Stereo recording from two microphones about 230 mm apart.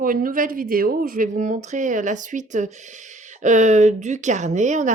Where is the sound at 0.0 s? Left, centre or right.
Right.